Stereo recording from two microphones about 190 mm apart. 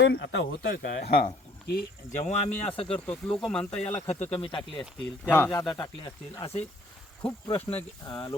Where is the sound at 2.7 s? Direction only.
30° left (ahead or behind).